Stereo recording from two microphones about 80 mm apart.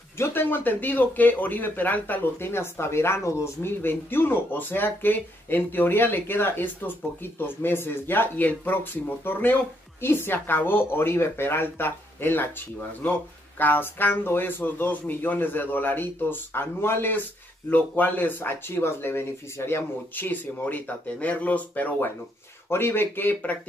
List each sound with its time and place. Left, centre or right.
0.2 s speech: left
13.6 s speech: left